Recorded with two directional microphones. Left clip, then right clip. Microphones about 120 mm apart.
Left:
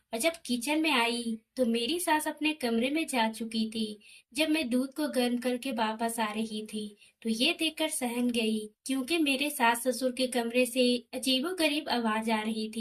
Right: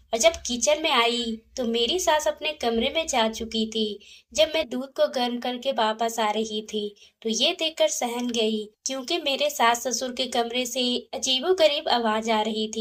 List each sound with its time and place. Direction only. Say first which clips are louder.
0.1 s speech: right 9 dB; 30° right (ahead or behind)
5.1 s a woman's voice: right 3 dB; 30° right (ahead or behind)